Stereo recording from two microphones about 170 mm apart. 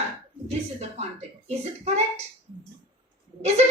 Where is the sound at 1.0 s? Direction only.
40° right (ahead or behind).